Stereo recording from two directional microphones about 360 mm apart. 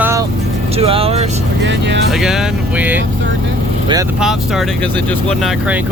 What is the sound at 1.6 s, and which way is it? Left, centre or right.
Speech, right.